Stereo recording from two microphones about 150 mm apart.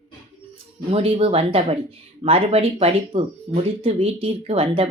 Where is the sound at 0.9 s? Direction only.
40° right (ahead or behind).